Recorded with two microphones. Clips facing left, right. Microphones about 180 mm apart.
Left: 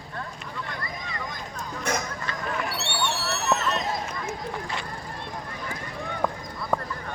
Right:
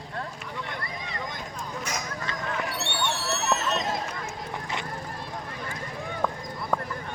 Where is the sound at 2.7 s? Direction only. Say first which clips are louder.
Left 1 dB; 55° right (ahead or behind).